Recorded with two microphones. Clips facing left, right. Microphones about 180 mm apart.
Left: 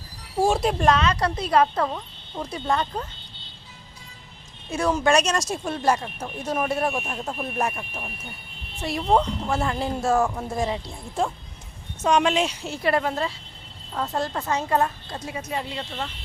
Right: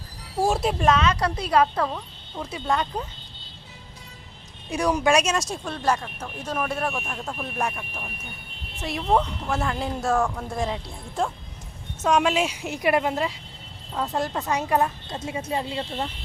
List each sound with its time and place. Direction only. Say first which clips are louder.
0.4 s speech: left 1 dB; centre (ahead or behind)
1.0 s a woman's voice: even; 30° left (ahead or behind)
1.8 s speech: left 1 dB; 10° left (ahead or behind)
4.7 s a woman's voice: even; 15° right (ahead or behind)
5.6 s speech: left 4 dB; 10° left (ahead or behind)
7.6 s a woman's voice: left 1 dB; centre (ahead or behind); by 16.0 s 30° right (ahead or behind)